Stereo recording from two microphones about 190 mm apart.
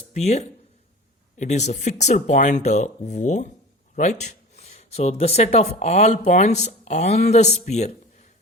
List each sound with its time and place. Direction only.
0.1 s speech: 35° left (ahead or behind)